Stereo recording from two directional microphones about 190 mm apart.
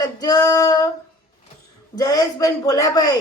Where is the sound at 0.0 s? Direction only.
20° left (ahead or behind).